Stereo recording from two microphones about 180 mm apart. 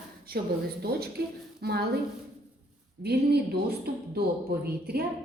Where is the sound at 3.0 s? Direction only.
65° right (ahead or behind).